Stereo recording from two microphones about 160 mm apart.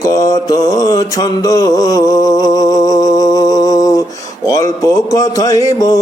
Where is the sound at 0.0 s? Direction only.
20° left (ahead or behind).